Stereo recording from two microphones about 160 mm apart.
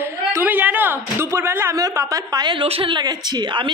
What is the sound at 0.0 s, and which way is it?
Speech, 15° right (ahead or behind).